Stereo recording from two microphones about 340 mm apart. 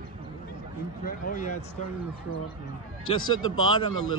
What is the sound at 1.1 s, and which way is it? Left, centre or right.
Speech, left.